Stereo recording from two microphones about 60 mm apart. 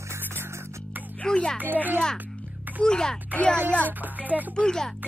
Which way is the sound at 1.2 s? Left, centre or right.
Centre.